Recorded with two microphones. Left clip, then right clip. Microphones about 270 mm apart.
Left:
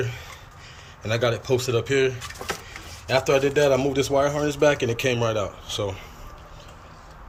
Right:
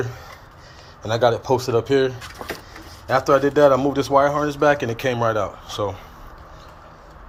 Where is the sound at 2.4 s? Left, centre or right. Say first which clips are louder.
Even; right.